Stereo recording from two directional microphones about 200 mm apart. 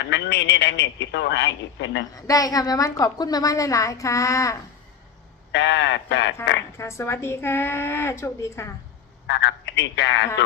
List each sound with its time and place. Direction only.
0.0 s a man's voice: 60° left (ahead or behind)
2.1 s a woman's voice: 15° left (ahead or behind)
5.5 s a man's voice: 60° left (ahead or behind)
6.7 s a woman's voice: 15° left (ahead or behind)
9.2 s a man's voice: 60° left (ahead or behind)